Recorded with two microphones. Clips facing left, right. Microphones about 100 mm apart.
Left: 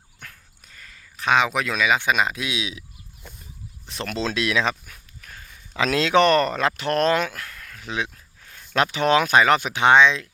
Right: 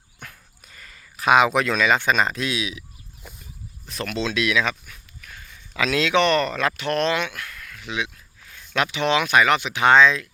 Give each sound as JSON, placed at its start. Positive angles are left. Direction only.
{"t": 0.2, "sound": "a sound", "side_deg": -15}
{"t": 0.7, "sound": "speech", "side_deg": -5}
{"t": 2.6, "sound": "speech", "side_deg": 30}
{"t": 3.3, "sound": "a sound", "side_deg": -5}
{"t": 3.8, "sound": "speech", "side_deg": 30}
{"t": 9.7, "sound": "speech", "side_deg": 20}